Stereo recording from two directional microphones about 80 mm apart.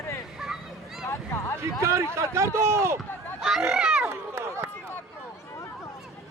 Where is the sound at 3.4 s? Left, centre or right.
Centre.